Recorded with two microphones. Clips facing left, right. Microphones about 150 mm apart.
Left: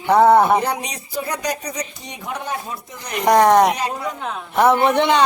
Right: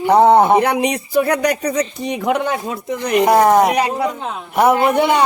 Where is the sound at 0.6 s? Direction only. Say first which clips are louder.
Right 7 dB; 60° right (ahead or behind).